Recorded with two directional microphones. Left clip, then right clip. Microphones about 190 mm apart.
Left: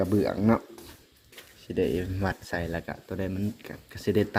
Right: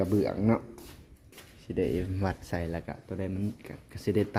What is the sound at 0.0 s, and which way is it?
Speech, 10° right (ahead or behind).